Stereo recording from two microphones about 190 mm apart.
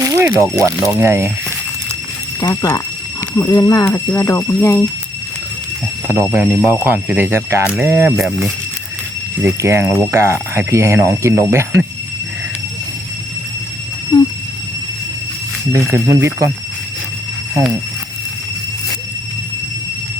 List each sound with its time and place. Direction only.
0.0 s speech: 15° right (ahead or behind)
2.4 s speech: 15° left (ahead or behind)
6.1 s speech: 10° right (ahead or behind)
9.4 s speech: 15° right (ahead or behind)
15.7 s speech: 15° right (ahead or behind)